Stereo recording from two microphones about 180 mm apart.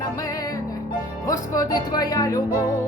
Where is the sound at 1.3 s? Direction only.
20° left (ahead or behind).